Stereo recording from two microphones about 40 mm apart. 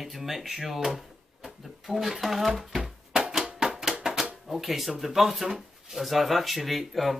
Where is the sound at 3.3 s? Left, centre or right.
Centre.